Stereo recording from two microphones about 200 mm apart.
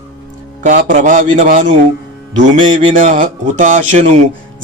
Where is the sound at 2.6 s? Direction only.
25° right (ahead or behind).